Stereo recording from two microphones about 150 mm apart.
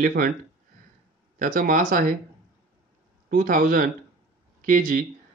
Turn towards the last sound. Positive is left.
turn(degrees=-65)  # may be behind; listen again after turning